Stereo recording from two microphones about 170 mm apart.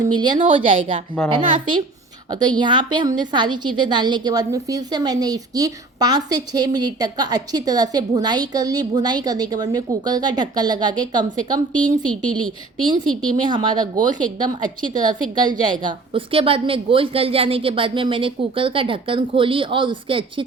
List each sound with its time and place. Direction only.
0.0 s a woman's voice: 25° right (ahead or behind)
13.4 s speech: 25° right (ahead or behind)